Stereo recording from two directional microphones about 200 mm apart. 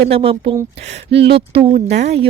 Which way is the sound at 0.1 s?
30° right (ahead or behind).